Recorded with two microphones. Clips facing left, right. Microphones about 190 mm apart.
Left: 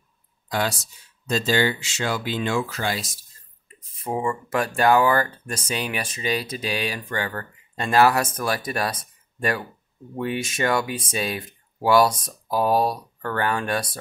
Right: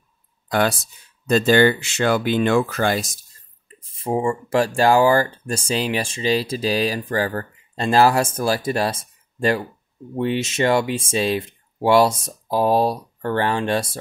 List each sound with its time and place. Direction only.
0.5 s speech: 55° right (ahead or behind)
3.6 s speech: 30° right (ahead or behind)